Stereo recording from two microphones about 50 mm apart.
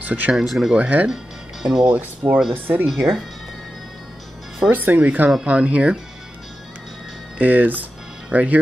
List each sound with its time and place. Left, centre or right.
0.0 s speech: right
0.5 s speech: centre
0.7 s speech: right
1.0 s music: centre
1.9 s speech: right
2.9 s speech: centre
4.6 s speech: right
7.3 s speech: right